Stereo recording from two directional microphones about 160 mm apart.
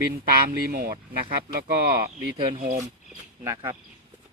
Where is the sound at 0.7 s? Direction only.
65° right (ahead or behind).